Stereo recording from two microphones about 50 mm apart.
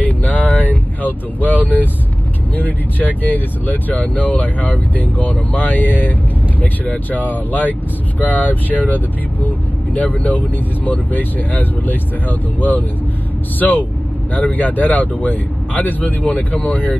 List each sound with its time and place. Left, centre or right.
0.0 s vehicle: left
2.5 s speech: left